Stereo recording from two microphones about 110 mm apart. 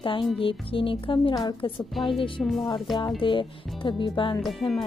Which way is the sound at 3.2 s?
50° left (ahead or behind).